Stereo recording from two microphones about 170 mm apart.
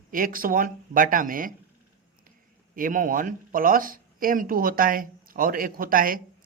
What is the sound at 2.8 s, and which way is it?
A man's voice, 50° right (ahead or behind).